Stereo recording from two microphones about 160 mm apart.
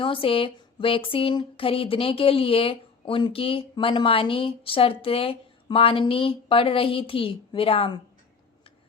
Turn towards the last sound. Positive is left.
turn(degrees=35)  # may be behind; listen again after turning